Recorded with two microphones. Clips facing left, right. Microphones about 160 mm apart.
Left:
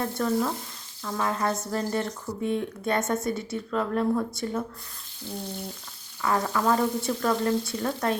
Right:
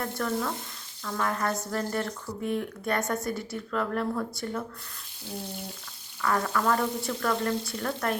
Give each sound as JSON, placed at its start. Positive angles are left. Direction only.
{"t": 0.0, "sound": "speech", "side_deg": 20}
{"t": 6.2, "sound": "speech", "side_deg": 20}